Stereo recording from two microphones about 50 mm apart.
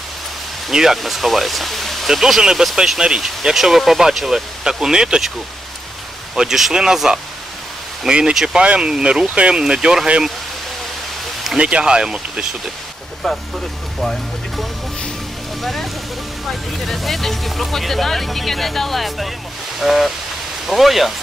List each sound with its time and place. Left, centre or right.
0.7 s speech: centre
6.3 s speech: centre
8.6 s speech: right
9.2 s speech: right
11.4 s speech: centre
13.2 s speech: centre
14.0 s music: centre
15.6 s vehicle: centre
16.5 s speech: centre